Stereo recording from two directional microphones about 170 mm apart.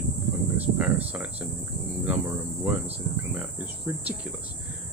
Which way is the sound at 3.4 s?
10° right (ahead or behind).